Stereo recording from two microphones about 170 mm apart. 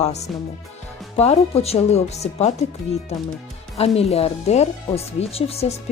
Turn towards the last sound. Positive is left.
turn(degrees=35)  # may be behind; listen again after turning